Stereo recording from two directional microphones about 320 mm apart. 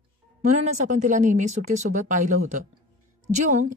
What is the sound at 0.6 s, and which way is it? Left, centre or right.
Speech, right.